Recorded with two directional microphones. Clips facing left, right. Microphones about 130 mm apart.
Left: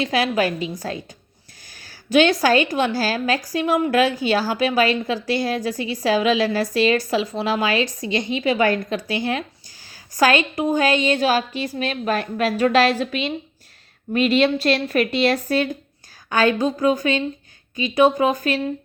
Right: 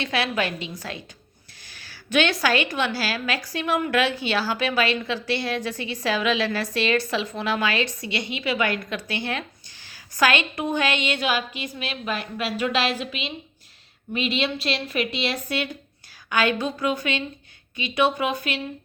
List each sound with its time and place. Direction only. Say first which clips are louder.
0.0 s a woman's voice: left 5 dB; 35° left (ahead or behind)